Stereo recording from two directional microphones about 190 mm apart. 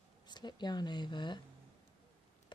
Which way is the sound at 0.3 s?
20° left (ahead or behind).